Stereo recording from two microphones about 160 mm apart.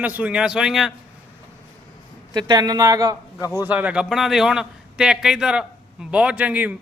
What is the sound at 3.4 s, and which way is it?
Speech, 20° left (ahead or behind).